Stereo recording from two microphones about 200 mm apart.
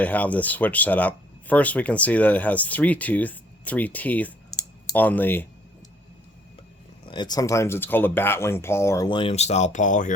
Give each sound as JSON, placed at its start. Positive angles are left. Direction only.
{"t": 0.0, "sound": "speech", "side_deg": 5}
{"t": 4.5, "sound": "clicking", "side_deg": 20}
{"t": 4.9, "sound": "speech", "side_deg": 10}
{"t": 7.0, "sound": "speech", "side_deg": 25}